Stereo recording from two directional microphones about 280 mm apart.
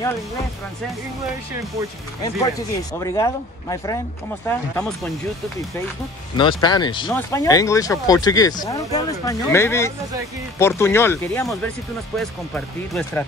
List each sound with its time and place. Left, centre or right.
2.2 s speech: centre
6.3 s speech: centre